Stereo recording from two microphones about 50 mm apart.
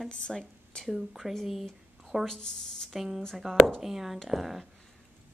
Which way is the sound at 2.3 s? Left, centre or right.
Centre.